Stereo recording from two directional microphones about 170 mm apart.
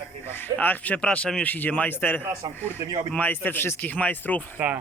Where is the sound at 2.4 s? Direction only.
25° right (ahead or behind).